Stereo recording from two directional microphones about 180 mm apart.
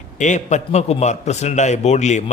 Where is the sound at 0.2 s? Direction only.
45° left (ahead or behind).